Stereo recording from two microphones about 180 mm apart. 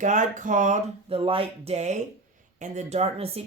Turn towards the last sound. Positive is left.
turn(degrees=-35)  # may be behind; listen again after turning